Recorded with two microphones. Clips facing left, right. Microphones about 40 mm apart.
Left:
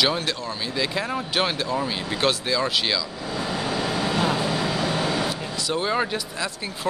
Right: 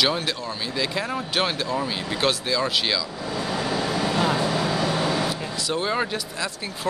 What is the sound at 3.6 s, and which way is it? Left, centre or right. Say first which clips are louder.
Vehicle: right 1 dB; left.